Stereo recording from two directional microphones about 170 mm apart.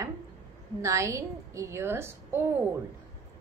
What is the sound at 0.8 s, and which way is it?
A woman's voice, 15° right (ahead or behind).